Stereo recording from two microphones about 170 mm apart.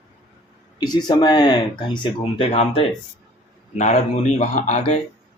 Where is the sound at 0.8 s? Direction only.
25° left (ahead or behind); by 4.8 s 45° left (ahead or behind).